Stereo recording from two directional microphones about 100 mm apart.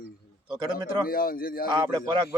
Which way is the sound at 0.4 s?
45° right (ahead or behind).